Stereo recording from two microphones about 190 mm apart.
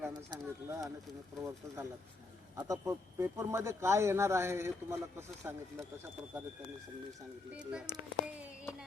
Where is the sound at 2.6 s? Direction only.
20° right (ahead or behind).